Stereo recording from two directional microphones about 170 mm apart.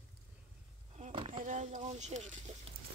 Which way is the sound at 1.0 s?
35° right (ahead or behind).